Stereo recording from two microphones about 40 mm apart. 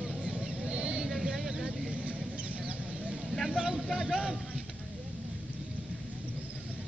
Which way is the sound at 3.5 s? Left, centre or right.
Centre.